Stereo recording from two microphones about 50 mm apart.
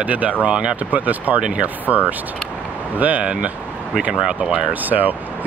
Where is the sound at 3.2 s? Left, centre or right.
Centre.